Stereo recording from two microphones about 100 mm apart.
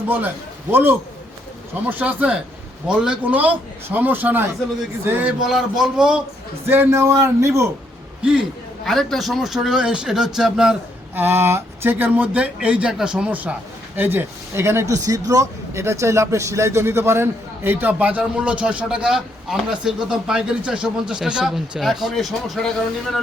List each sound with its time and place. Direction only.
0.7 s a man's voice: 20° right (ahead or behind)
5.4 s speech: 5° right (ahead or behind)
6.7 s a man's voice: 25° right (ahead or behind)
8.2 s speech: 10° right (ahead or behind)
8.8 s speech: 5° left (ahead or behind)
11.1 s a man's voice: 20° right (ahead or behind); by 23.2 s centre (ahead or behind)